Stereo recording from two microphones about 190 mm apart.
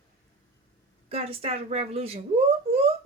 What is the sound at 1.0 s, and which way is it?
Speech, 30° right (ahead or behind).